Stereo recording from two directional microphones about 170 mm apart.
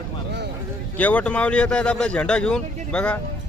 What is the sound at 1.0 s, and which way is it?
Speech, 10° left (ahead or behind).